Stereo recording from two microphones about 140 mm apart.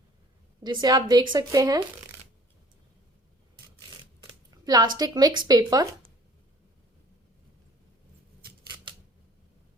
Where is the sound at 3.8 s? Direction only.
30° right (ahead or behind).